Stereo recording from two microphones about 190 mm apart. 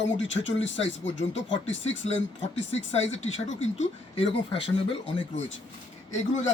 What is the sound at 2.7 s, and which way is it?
Speech, 35° left (ahead or behind).